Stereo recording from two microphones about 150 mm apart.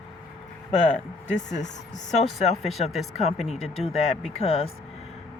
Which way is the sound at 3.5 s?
45° left (ahead or behind).